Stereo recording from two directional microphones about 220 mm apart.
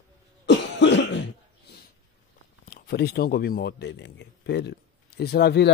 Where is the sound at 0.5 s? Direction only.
55° left (ahead or behind).